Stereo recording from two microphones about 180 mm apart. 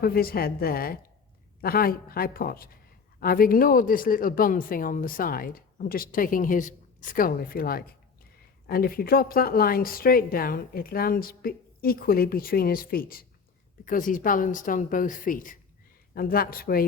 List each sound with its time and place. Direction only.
0.0 s a woman's voice: 55° left (ahead or behind)